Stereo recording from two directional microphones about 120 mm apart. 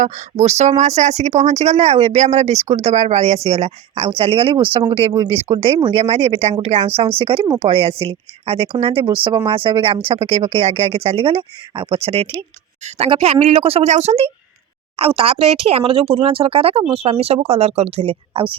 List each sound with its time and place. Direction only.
0.0 s speech: 80° right; by 7.1 s 60° right (ahead or behind)
7.2 s speech: 50° right (ahead or behind)
14.9 s speech: 50° right (ahead or behind)